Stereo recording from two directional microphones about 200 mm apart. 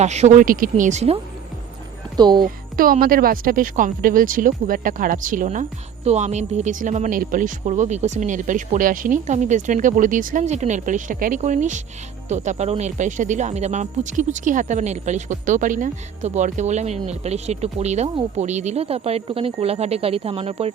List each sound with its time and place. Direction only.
0.0 s speech: 35° right (ahead or behind)
2.1 s speech: 20° right (ahead or behind)
2.4 s speech: 45° right (ahead or behind)